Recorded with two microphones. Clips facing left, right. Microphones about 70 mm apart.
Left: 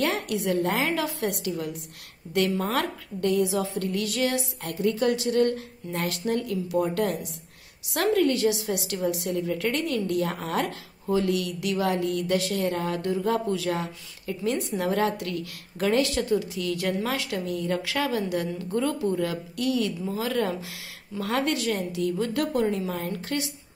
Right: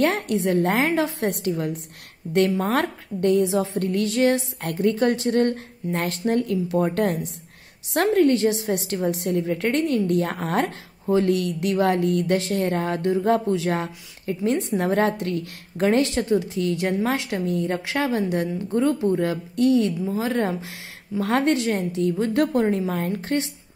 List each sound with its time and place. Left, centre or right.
0.0 s a woman's voice: right
4.6 s a woman's voice: right